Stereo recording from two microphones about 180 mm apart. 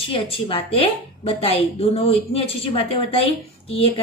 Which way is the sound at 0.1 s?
30° left (ahead or behind).